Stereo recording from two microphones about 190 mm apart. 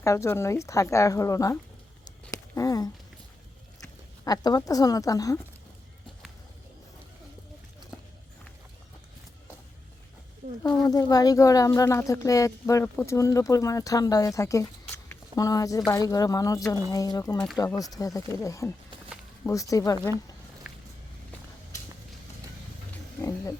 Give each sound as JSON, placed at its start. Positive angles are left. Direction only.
{"t": 0.0, "sound": "speech", "side_deg": 15}
{"t": 2.3, "sound": "a sound", "side_deg": 20}
{"t": 4.2, "sound": "a woman's voice", "side_deg": 20}
{"t": 10.6, "sound": "speech", "side_deg": 20}
{"t": 17.3, "sound": "speech", "side_deg": 5}
{"t": 17.6, "sound": "speech", "side_deg": 20}
{"t": 20.7, "sound": "vehicle", "side_deg": -10}